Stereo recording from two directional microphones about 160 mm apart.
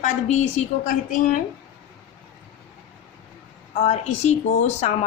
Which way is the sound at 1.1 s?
55° left (ahead or behind).